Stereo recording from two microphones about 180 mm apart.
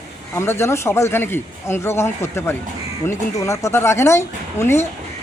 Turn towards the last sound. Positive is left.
turn(degrees=15)  # may be behind; listen again after turning